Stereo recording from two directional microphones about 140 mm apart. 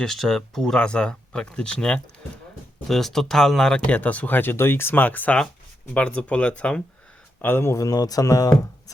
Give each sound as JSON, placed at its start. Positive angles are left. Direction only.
{"t": 0.0, "sound": "speech", "side_deg": 5}